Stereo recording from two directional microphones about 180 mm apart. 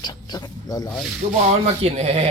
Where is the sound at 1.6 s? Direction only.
35° right (ahead or behind).